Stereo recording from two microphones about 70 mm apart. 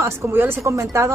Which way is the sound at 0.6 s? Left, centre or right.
Right.